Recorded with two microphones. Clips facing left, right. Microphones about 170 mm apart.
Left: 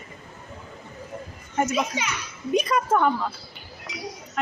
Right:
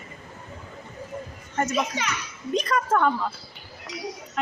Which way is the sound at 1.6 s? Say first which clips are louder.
Left 1 dB; 5° left (ahead or behind).